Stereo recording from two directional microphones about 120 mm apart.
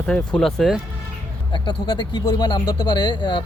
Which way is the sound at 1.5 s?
40° left (ahead or behind).